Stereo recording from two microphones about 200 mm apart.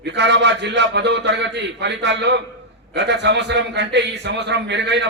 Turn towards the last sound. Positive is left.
turn(degrees=-60)  # may be behind; listen again after turning